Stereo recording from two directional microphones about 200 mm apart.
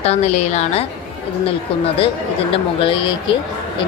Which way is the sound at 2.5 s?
25° left (ahead or behind).